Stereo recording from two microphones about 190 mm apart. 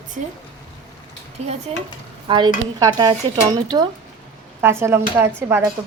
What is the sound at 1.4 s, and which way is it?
Speech, 35° right (ahead or behind).